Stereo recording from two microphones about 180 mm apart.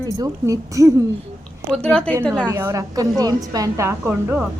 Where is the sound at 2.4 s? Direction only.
15° right (ahead or behind).